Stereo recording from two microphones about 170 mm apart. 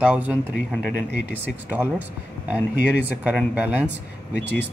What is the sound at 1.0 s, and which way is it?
Speech, 80° left.